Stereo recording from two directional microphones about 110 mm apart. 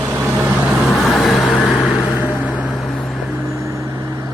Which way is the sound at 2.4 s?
10° right (ahead or behind).